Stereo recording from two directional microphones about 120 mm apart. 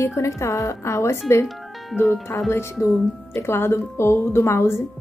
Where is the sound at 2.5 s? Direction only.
20° left (ahead or behind).